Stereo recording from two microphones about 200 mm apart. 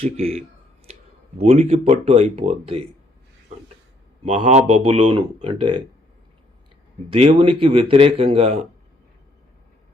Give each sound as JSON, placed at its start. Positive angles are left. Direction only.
{"t": 0.0, "sound": "speech", "side_deg": -30}
{"t": 4.4, "sound": "speech", "side_deg": -30}
{"t": 7.1, "sound": "speech", "side_deg": -30}